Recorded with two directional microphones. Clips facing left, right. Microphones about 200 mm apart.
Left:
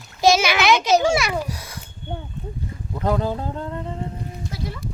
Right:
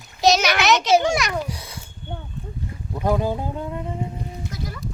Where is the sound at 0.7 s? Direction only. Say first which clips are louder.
Left 1 dB; 10° left (ahead or behind).